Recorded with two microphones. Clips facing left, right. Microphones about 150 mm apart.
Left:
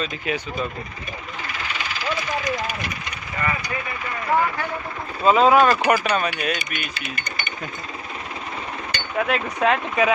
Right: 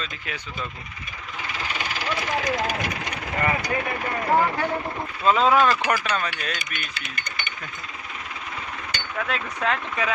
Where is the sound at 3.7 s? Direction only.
50° right (ahead or behind).